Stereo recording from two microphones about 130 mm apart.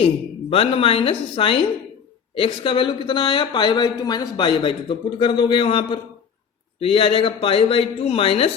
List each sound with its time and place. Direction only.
0.5 s speech: 45° left (ahead or behind)